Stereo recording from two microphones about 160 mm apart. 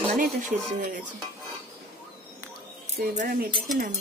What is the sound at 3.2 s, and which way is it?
Speech, 70° right (ahead or behind).